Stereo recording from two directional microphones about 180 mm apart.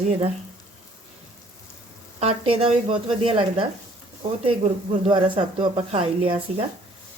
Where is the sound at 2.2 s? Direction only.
30° right (ahead or behind).